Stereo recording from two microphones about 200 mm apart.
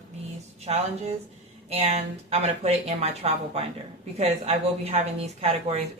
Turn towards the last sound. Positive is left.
turn(degrees=-30)  # may be behind; listen again after turning